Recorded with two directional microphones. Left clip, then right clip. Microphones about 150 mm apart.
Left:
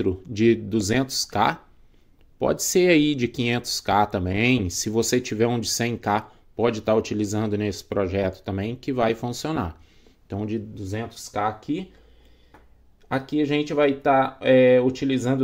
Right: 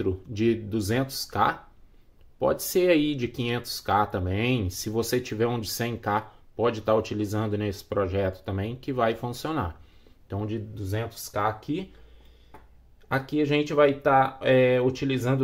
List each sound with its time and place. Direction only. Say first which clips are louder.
0.0 s speech: left 5 dB; 40° left (ahead or behind); by 11.9 s 20° left (ahead or behind)
13.1 s speech: left 1 dB; 20° left (ahead or behind)